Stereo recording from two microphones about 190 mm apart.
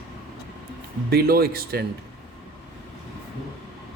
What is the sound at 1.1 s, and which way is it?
Speech, 55° right (ahead or behind).